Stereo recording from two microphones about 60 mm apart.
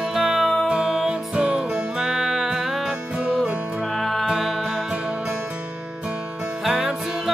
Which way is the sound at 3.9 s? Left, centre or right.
Centre.